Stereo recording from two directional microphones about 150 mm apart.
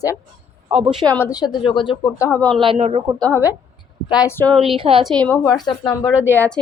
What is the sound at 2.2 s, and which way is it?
Speech, 15° left (ahead or behind).